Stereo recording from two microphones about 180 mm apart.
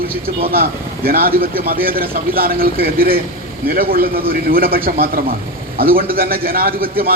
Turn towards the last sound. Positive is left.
turn(degrees=-55)  # may be behind; listen again after turning